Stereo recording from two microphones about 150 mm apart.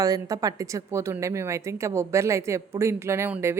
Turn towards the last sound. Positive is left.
turn(degrees=-15)  # may be behind; listen again after turning